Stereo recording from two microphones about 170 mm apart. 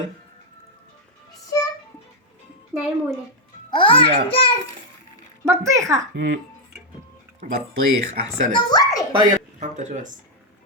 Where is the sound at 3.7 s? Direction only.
30° left (ahead or behind).